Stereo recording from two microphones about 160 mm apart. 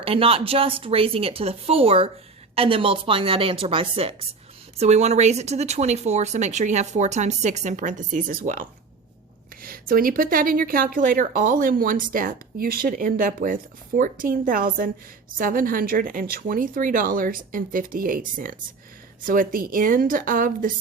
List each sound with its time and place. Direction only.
0.0 s a woman's voice: 35° right (ahead or behind); by 8.5 s 60° right (ahead or behind)
9.6 s a woman's voice: 65° right (ahead or behind)